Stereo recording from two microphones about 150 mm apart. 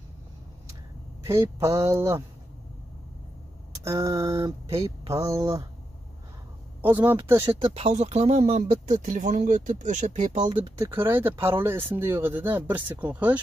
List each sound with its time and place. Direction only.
1.2 s speech: 20° right (ahead or behind)
3.8 s speech: 25° right (ahead or behind)
6.8 s a man's voice: 15° right (ahead or behind)
7.6 s speech: 45° right (ahead or behind)
10.4 s speech: 35° right (ahead or behind)
10.8 s speech: 15° right (ahead or behind)